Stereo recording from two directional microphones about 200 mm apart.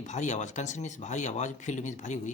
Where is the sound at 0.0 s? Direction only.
35° left (ahead or behind).